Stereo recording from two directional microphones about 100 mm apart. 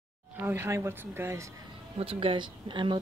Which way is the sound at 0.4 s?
20° right (ahead or behind).